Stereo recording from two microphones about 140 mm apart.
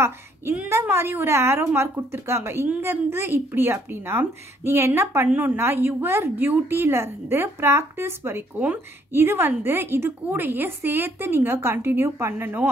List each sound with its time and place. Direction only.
0.0 s a woman's voice: 15° right (ahead or behind)